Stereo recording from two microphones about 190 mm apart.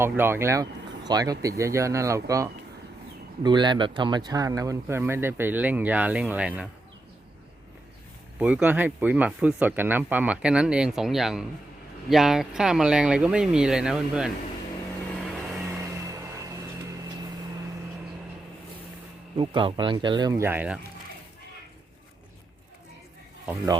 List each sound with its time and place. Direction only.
0.0 s speech: 10° right (ahead or behind)
8.4 s speech: 5° right (ahead or behind)
15.3 s vehicle: centre (ahead or behind)
15.8 s a sound: 15° right (ahead or behind)
19.4 s speech: 25° right (ahead or behind); by 20.7 s 10° right (ahead or behind)